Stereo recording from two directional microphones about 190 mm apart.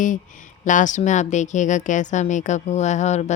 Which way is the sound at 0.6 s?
40° left (ahead or behind).